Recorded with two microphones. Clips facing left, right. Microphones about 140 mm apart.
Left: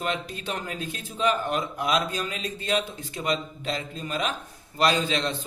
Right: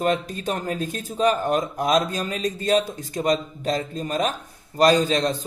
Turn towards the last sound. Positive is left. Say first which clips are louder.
# right 6 dB
turn(degrees=-40)  # may be behind; listen again after turning